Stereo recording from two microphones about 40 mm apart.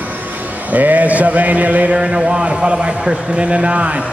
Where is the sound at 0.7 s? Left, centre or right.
Right.